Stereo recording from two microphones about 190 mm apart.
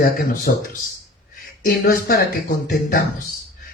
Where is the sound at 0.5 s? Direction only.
50° left (ahead or behind).